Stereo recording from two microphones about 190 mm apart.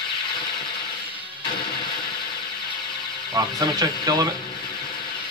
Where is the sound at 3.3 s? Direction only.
20° right (ahead or behind).